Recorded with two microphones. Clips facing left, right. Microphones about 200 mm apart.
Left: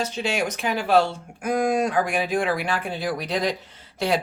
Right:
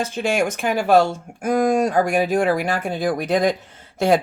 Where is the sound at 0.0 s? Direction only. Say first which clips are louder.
Right 4 dB; 50° right (ahead or behind).